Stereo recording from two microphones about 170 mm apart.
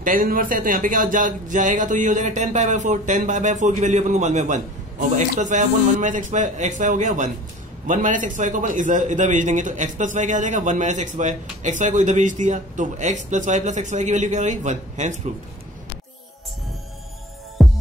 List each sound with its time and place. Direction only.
0.0 s a man's voice: 55° right (ahead or behind)
17.6 s music: centre (ahead or behind)